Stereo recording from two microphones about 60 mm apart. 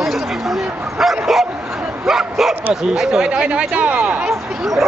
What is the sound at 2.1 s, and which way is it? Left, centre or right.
Bow-wow, centre.